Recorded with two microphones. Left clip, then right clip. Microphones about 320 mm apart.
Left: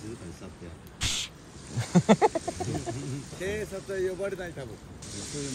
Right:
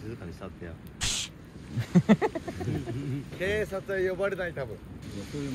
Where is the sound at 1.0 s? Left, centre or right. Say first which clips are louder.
Even; centre.